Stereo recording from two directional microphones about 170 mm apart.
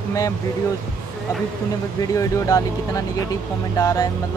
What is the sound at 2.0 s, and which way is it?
Speech, 20° left (ahead or behind).